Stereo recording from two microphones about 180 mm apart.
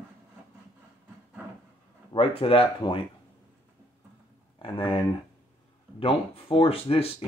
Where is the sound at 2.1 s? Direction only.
30° left (ahead or behind).